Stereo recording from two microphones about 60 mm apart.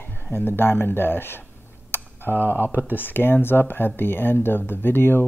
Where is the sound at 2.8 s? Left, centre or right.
Left.